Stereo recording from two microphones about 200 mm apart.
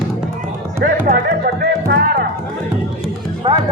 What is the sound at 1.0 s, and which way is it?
Speech, 45° right (ahead or behind).